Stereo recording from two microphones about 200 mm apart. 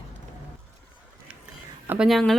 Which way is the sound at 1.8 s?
5° right (ahead or behind).